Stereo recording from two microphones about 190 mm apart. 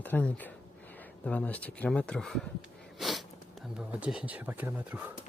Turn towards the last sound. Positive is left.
turn(degrees=-10)  # may be behind; listen again after turning